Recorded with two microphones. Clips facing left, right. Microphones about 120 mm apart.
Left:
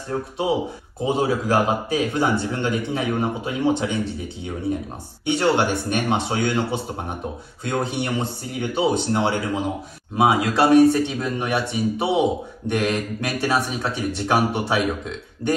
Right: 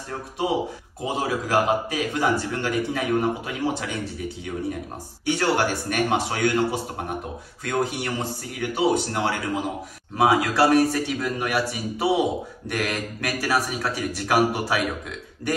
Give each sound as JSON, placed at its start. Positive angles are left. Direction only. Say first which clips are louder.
{"t": 1.0, "sound": "speech", "louder": "left 5 dB", "side_deg": 30}
{"t": 5.2, "sound": "speech", "louder": "left 3 dB", "side_deg": 20}